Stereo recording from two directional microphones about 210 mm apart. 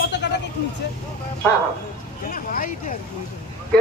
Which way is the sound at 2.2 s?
40° left (ahead or behind).